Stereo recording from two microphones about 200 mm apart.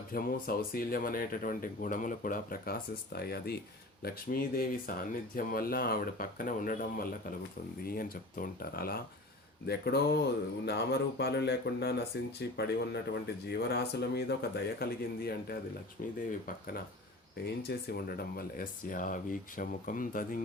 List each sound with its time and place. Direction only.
0.1 s speech: 45° left (ahead or behind)
17.7 s speech: 50° left (ahead or behind)